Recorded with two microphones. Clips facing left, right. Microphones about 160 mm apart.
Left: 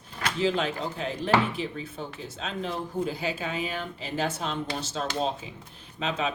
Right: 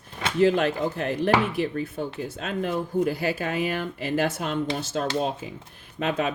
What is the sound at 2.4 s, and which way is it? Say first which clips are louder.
Speech: right 4 dB; 55° right (ahead or behind).